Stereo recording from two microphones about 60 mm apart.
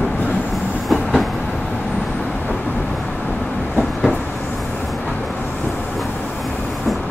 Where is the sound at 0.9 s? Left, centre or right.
Centre.